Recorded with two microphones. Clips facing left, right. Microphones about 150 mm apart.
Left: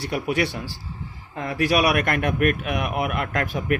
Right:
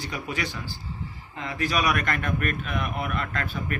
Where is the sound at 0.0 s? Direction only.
65° left (ahead or behind).